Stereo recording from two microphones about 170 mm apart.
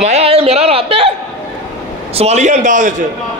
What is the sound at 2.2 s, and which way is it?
Speech, 40° right (ahead or behind).